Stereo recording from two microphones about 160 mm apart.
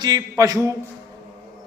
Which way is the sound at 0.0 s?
25° right (ahead or behind).